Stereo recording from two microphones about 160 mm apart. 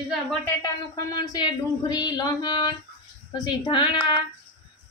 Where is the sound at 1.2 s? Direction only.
25° left (ahead or behind).